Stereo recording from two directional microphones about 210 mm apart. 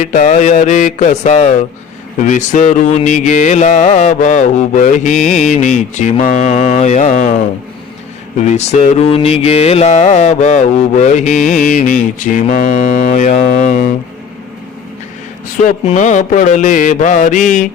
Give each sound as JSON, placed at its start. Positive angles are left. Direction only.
{"t": 0.0, "sound": "mantra", "side_deg": 35}
{"t": 8.5, "sound": "mantra", "side_deg": 30}
{"t": 15.6, "sound": "mantra", "side_deg": 30}